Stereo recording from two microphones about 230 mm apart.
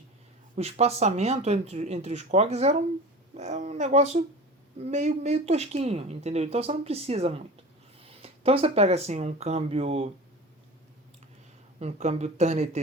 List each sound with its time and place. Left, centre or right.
0.5 s speech: right
11.8 s speech: right